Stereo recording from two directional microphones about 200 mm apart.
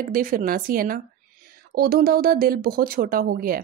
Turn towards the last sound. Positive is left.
turn(degrees=-45)  # may be behind; listen again after turning